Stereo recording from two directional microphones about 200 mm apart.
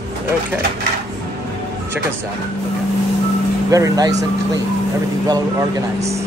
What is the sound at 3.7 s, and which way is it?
Speech, 15° right (ahead or behind).